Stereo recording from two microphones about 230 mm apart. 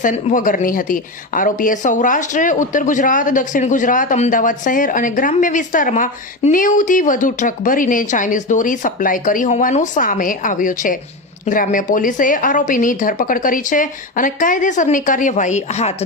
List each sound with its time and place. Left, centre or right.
0.0 s speech: left